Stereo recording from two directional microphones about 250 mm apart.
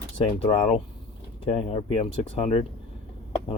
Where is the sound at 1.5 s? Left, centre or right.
Left.